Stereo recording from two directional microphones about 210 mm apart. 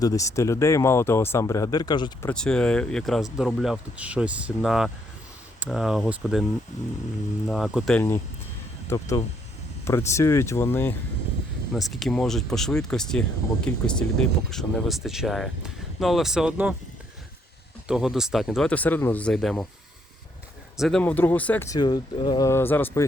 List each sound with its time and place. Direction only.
0.0 s speech: 15° left (ahead or behind)
2.3 s speech: 5° left (ahead or behind)
7.4 s speech: centre (ahead or behind)
17.8 s speech: centre (ahead or behind)
20.7 s speech: centre (ahead or behind)